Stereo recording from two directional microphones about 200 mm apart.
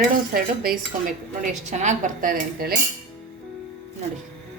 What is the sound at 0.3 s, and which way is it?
A woman's voice, 45° right (ahead or behind).